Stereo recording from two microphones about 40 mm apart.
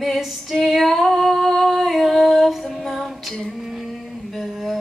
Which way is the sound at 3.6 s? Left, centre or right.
Centre.